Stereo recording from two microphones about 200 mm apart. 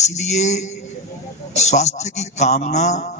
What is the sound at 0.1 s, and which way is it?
A man's voice, 35° left (ahead or behind).